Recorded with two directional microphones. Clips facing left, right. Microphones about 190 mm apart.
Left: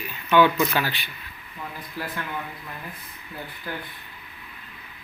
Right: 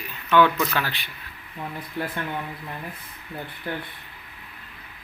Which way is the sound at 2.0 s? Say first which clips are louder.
Right 4 dB; 25° right (ahead or behind).